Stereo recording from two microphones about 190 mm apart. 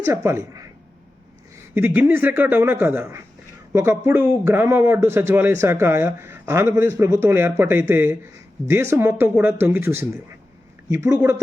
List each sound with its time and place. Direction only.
0.0 s a man's voice: 15° right (ahead or behind)
1.7 s a man's voice: 10° right (ahead or behind)